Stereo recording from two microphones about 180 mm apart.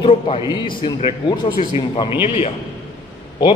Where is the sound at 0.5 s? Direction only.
25° left (ahead or behind).